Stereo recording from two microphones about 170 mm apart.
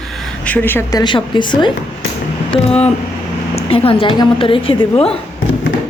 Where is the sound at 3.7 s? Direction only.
35° left (ahead or behind).